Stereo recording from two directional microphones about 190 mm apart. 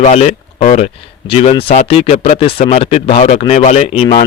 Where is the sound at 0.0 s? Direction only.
35° left (ahead or behind).